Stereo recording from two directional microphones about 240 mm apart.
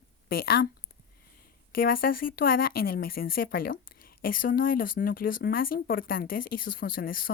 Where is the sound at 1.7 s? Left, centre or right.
Left.